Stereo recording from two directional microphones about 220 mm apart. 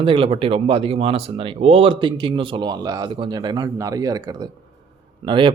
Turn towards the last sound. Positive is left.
turn(degrees=-20)  # may be behind; listen again after turning